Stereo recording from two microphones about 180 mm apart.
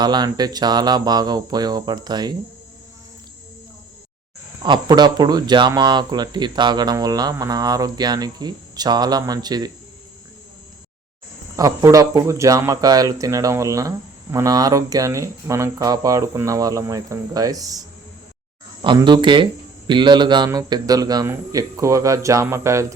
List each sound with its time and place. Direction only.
0.0 s speech: 25° right (ahead or behind)
4.6 s speech: 25° right (ahead or behind)
11.5 s speech: 20° right (ahead or behind)